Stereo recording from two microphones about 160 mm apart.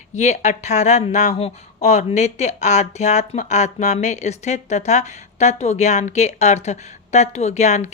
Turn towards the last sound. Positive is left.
turn(degrees=45)  # may be behind; listen again after turning